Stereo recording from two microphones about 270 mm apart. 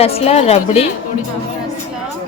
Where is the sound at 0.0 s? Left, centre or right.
Left.